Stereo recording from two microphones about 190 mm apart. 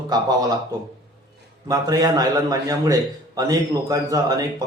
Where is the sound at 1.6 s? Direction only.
20° right (ahead or behind).